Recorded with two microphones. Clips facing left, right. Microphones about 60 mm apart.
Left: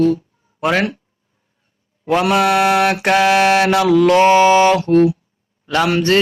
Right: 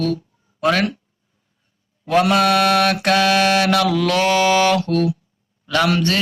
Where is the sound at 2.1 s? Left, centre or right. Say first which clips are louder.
Left 1 dB; centre.